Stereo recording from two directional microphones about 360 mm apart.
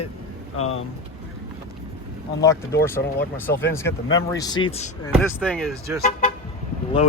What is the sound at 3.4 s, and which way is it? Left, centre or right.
Speech, centre.